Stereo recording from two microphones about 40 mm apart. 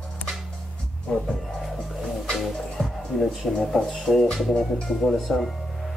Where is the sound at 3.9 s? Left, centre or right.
Centre.